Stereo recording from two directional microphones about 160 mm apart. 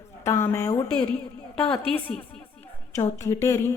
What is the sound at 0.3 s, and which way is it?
Speech, 15° left (ahead or behind).